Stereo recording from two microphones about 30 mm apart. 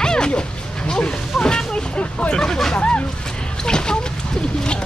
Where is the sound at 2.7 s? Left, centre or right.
Left.